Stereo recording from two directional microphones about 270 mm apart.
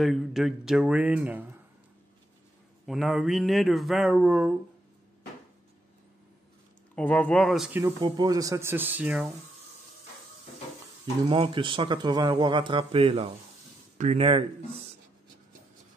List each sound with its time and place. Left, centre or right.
0.0 s speech: centre
2.9 s speech: centre
7.0 s speech: centre
8.0 s speech: centre
11.2 s a man's voice: centre